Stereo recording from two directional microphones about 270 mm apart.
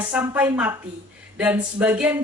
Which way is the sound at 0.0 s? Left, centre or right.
Centre.